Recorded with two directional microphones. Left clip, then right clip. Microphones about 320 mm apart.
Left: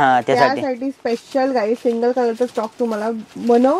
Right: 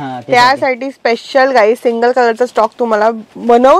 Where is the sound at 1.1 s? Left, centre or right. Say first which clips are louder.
Right 9 dB; centre.